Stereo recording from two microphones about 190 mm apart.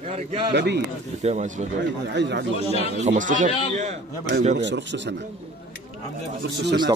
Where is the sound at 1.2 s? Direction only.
35° right (ahead or behind).